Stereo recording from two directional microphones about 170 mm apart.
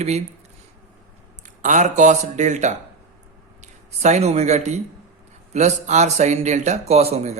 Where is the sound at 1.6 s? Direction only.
45° right (ahead or behind).